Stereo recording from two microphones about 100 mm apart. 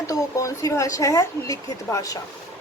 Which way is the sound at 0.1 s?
35° left (ahead or behind).